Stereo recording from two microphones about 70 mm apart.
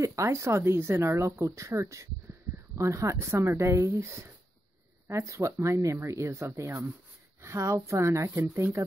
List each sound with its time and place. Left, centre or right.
0.0 s speech: right